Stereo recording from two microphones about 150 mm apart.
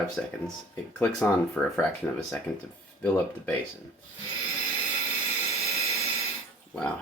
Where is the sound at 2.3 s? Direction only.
15° left (ahead or behind).